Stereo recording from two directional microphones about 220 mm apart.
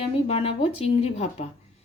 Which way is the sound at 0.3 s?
25° left (ahead or behind).